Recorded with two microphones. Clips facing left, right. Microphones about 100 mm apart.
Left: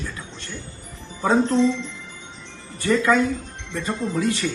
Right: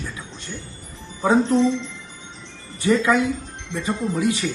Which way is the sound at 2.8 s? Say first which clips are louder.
Right 2 dB; 20° right (ahead or behind).